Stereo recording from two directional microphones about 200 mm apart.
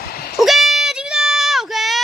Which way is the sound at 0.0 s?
50° left (ahead or behind).